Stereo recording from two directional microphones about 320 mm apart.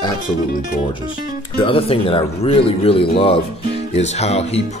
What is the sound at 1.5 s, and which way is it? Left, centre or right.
Speech, centre.